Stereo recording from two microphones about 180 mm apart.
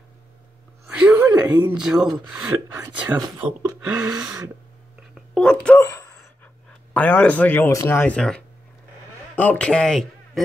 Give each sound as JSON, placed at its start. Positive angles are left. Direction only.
{"t": 0.8, "sound": "a sound", "side_deg": -5}
{"t": 1.7, "sound": "speech", "side_deg": -5}
{"t": 5.3, "sound": "a man's voice", "side_deg": 5}